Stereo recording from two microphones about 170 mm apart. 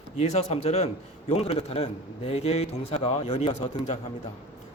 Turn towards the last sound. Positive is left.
turn(degrees=40)  # may be behind; listen again after turning